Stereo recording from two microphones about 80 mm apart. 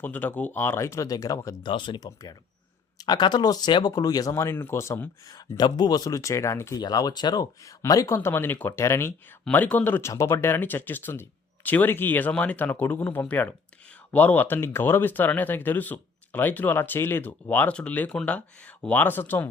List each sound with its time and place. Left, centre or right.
0.0 s speech: left
1.6 s speech: left
3.0 s speech: left
4.4 s speech: left
5.3 s speech: left
6.7 s speech: left
7.6 s speech: left
9.5 s speech: left
10.0 s speech: left